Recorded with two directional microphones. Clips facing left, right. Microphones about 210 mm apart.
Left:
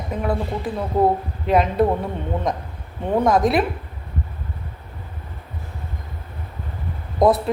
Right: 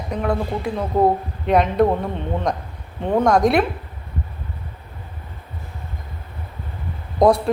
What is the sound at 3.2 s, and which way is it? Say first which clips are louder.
Speech: right 2 dB; centre (ahead or behind).